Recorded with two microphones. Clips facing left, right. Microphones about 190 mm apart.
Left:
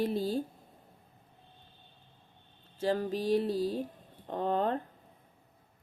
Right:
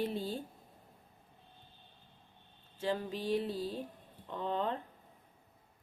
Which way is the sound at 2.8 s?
40° left (ahead or behind).